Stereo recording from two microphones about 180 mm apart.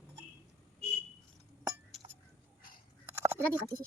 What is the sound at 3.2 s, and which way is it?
Speech, 15° right (ahead or behind).